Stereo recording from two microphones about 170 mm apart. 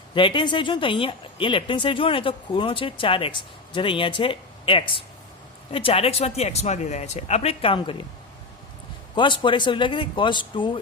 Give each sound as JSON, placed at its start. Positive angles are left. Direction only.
{"t": 0.1, "sound": "speech", "side_deg": 30}
{"t": 9.1, "sound": "speech", "side_deg": 30}